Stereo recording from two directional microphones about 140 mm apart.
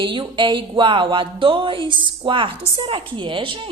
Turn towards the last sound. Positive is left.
turn(degrees=-35)  # may be behind; listen again after turning